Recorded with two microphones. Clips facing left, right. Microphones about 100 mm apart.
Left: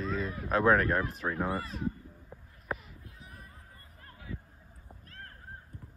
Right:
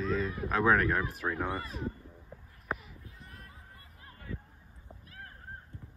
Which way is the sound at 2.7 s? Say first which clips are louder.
Even; centre (ahead or behind).